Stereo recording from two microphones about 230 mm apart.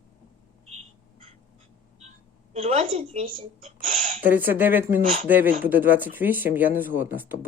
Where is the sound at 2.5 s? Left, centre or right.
Right.